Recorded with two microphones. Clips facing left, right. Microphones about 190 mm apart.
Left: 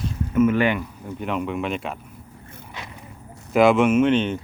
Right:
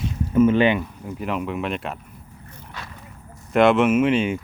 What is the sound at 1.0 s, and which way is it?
Speech, centre (ahead or behind).